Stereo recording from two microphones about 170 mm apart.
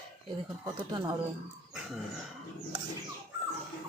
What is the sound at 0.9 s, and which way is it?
Speech, 25° right (ahead or behind).